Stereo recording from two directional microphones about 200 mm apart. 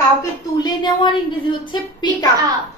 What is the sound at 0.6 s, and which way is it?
A woman's voice, 20° left (ahead or behind).